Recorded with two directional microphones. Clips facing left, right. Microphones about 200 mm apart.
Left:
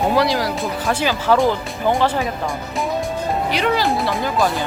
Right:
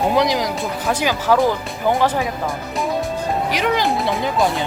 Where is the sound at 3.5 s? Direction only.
15° right (ahead or behind).